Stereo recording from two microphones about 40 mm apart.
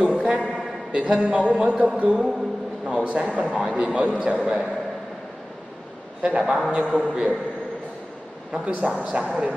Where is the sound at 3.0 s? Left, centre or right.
Right.